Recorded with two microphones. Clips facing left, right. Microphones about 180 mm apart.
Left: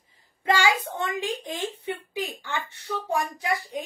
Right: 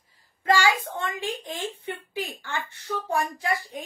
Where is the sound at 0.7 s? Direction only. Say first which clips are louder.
Even; 20° left (ahead or behind).